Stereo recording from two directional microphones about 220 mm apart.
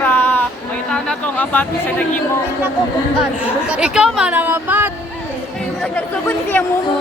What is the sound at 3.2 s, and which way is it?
Speech, 5° right (ahead or behind).